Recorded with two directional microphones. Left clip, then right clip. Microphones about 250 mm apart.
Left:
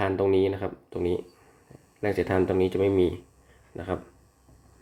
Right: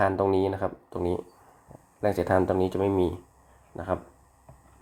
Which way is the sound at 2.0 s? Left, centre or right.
Centre.